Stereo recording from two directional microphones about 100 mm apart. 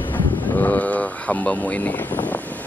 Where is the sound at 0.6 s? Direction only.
15° left (ahead or behind).